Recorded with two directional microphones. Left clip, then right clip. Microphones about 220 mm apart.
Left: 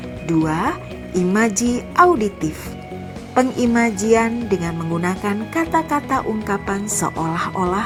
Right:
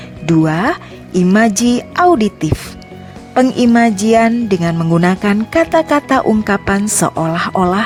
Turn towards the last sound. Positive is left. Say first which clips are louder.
# right 6 dB
turn(degrees=-40)  # may be behind; listen again after turning